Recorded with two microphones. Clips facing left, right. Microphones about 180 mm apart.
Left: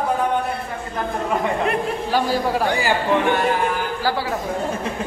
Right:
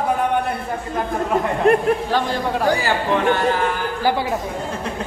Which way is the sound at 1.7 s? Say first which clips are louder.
Right 7 dB; 45° right (ahead or behind).